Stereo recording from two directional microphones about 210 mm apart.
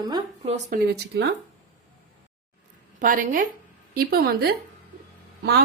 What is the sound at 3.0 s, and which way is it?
A woman's voice, 40° right (ahead or behind).